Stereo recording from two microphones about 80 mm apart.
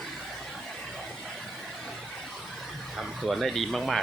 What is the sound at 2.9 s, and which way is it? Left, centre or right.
Speech, centre.